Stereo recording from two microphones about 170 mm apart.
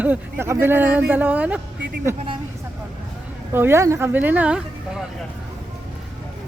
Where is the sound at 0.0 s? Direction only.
10° right (ahead or behind).